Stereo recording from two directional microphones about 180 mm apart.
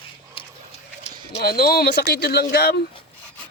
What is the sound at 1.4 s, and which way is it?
Speech, 60° left (ahead or behind).